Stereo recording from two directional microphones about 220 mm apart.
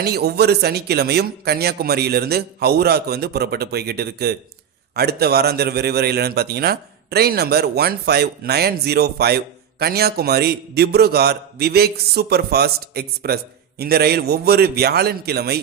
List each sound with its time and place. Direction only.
0.0 s a man's voice: 45° right (ahead or behind)